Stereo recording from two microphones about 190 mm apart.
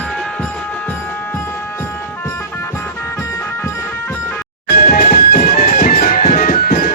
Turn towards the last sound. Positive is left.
turn(degrees=50)  # may be behind; listen again after turning